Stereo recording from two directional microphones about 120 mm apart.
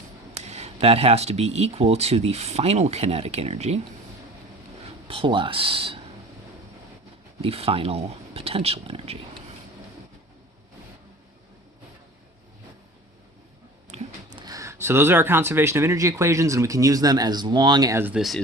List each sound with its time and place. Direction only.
0.3 s speech: 65° right (ahead or behind)
5.0 s speech: 50° right (ahead or behind)
7.4 s speech: 55° right (ahead or behind)
13.9 s a sound: 65° right (ahead or behind)
14.3 s speech: 30° right (ahead or behind)
18.1 s speech: centre (ahead or behind)